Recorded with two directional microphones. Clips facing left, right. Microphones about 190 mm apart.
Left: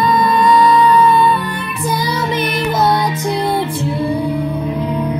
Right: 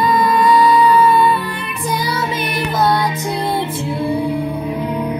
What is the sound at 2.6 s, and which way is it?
Music, 20° left (ahead or behind).